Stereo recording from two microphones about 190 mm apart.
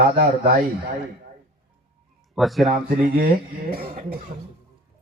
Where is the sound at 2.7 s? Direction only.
45° right (ahead or behind).